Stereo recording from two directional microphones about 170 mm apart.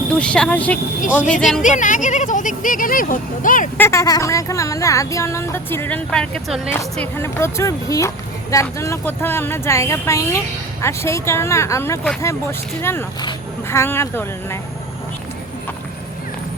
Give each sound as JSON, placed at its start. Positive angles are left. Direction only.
{"t": 0.1, "sound": "speech", "side_deg": 5}
{"t": 1.6, "sound": "speech", "side_deg": 50}
{"t": 3.8, "sound": "speech", "side_deg": 15}